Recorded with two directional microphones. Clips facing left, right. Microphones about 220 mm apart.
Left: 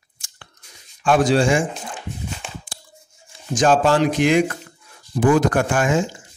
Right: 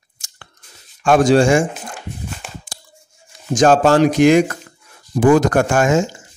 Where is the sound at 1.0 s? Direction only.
45° right (ahead or behind).